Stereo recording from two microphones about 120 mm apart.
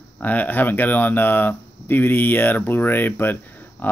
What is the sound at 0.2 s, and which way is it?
Speech, 15° left (ahead or behind).